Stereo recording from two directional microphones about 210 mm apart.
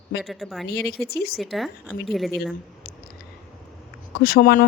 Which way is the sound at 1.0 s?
50° left (ahead or behind).